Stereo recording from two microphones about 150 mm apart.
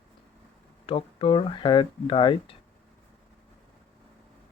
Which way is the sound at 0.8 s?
35° left (ahead or behind).